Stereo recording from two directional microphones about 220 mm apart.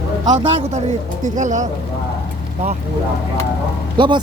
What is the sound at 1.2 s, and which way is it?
Speech, 35° right (ahead or behind).